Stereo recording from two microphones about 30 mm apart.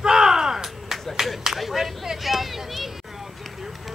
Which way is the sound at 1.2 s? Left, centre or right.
Centre.